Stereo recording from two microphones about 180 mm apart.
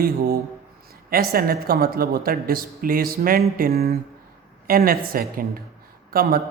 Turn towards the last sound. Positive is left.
turn(degrees=-55)  # may be behind; listen again after turning